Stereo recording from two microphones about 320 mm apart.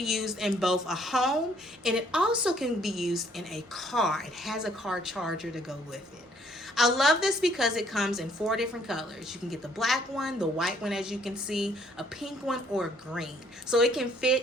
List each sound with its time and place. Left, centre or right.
0.0 s a woman's voice: centre